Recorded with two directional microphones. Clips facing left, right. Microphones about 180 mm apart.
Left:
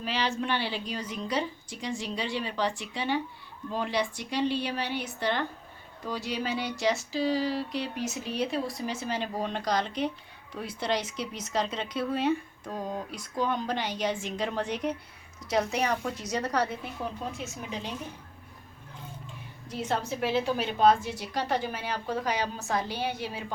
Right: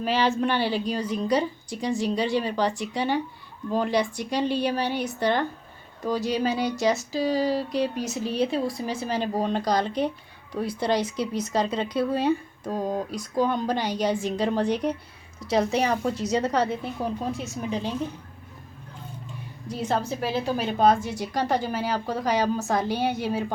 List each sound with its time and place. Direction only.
0.0 s a woman's voice: 50° right (ahead or behind); by 16.6 s 25° right (ahead or behind)
17.0 s speech: 35° right (ahead or behind)
19.7 s speech: 35° right (ahead or behind)